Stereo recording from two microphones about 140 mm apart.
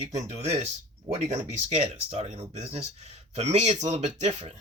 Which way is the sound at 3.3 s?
50° right (ahead or behind).